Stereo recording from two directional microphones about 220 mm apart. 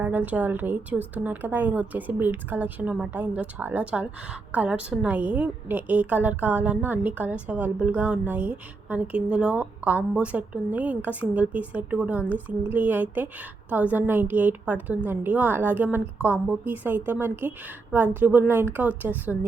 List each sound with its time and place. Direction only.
0.0 s a woman's voice: 10° right (ahead or behind)